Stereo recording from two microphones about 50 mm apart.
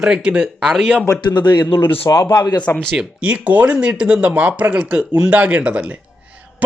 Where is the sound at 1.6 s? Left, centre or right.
Left.